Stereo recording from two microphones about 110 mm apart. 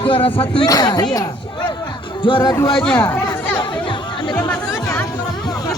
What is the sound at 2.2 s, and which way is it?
Speech, 50° left (ahead or behind).